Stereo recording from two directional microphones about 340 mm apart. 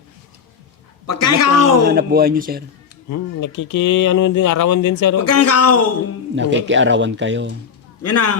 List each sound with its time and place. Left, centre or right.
1.0 s a man's voice: left
1.9 s speech: right
3.1 s speech: left
6.3 s speech: right
8.0 s a man's voice: left